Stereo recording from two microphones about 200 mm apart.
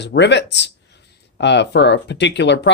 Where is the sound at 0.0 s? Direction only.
60° left (ahead or behind).